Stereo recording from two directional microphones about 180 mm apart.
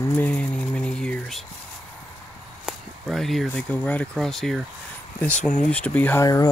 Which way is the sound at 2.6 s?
Centre (ahead or behind).